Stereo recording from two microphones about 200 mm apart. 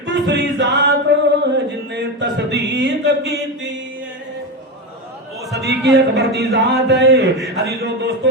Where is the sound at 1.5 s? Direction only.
60° right (ahead or behind).